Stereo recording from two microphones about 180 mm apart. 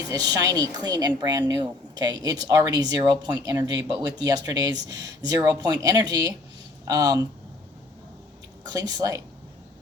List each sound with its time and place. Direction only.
0.1 s speech: 20° right (ahead or behind)
8.6 s speech: 20° right (ahead or behind)